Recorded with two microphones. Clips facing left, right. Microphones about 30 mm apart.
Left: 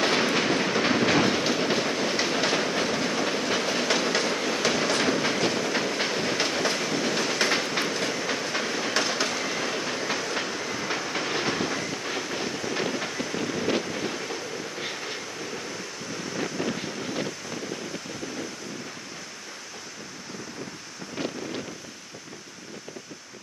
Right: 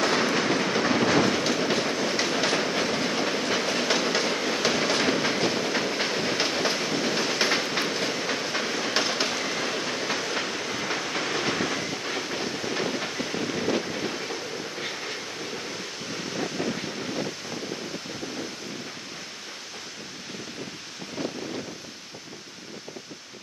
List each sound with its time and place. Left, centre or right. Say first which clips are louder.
0.0 s train: even; centre
15.4 s waves: even; centre
16.1 s wind: even; right
16.6 s wind noise: even; centre
21.2 s wind: even; centre